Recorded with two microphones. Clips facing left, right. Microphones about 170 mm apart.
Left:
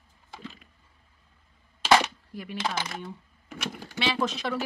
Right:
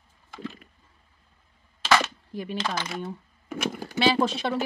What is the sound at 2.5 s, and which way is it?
Speech, 10° left (ahead or behind).